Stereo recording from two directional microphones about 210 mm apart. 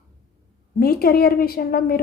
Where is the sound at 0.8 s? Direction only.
45° left (ahead or behind).